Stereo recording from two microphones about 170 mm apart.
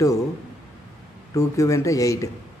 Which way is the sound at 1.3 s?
20° left (ahead or behind).